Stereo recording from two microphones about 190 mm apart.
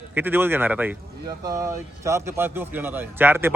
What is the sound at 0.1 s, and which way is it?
Speech, 10° right (ahead or behind).